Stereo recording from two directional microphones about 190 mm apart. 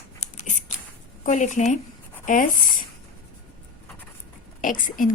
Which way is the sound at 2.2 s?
45° left (ahead or behind).